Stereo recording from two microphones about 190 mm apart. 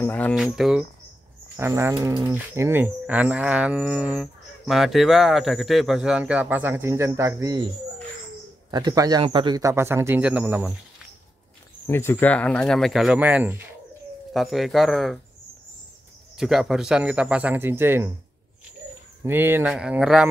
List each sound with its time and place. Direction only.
0.0 s speech: 10° left (ahead or behind)
0.4 s speech: centre (ahead or behind)
1.6 s speech: 15° right (ahead or behind)
11.9 s speech: 10° left (ahead or behind)
16.3 s speech: centre (ahead or behind)
19.2 s speech: 10° right (ahead or behind)